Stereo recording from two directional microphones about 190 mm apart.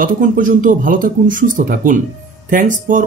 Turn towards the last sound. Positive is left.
turn(degrees=-45)  # may be behind; listen again after turning